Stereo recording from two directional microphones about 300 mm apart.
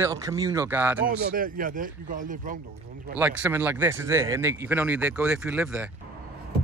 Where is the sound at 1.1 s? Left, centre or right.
Right.